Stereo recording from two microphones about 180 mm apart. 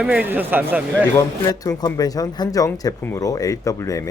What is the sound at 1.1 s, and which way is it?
Speech, 20° left (ahead or behind).